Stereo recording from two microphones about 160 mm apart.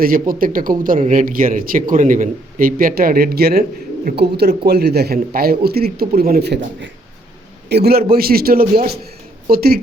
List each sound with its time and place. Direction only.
0.0 s a man's voice: 65° right (ahead or behind)
4.1 s a man's voice: 90° right
7.7 s a man's voice: 85° right
8.1 s speech: 70° right (ahead or behind)